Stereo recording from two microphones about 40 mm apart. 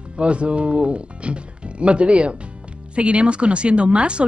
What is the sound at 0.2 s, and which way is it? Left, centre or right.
A woman's voice, right.